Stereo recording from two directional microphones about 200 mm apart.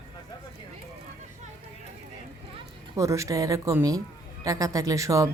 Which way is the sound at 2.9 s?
15° right (ahead or behind).